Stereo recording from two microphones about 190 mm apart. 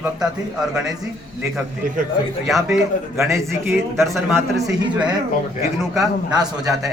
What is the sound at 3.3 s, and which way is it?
A man's voice, 15° right (ahead or behind).